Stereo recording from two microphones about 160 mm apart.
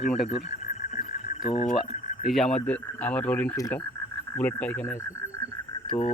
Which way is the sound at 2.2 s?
Centre (ahead or behind).